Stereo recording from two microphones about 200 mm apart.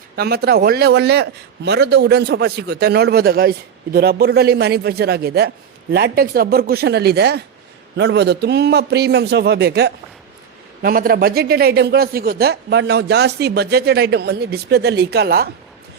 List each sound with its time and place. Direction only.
0.2 s a man's voice: 50° right (ahead or behind)